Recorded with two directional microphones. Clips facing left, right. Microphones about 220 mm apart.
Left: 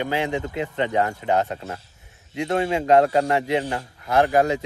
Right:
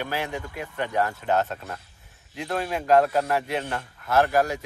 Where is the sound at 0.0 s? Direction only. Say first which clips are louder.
Left 6 dB; 20° left (ahead or behind).